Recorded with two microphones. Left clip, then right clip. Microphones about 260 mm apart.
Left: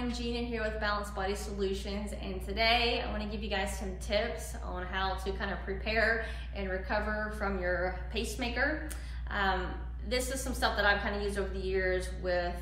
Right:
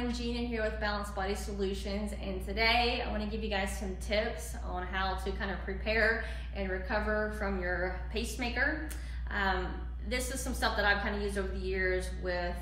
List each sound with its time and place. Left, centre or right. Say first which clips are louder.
0.0 s a woman's voice: even; centre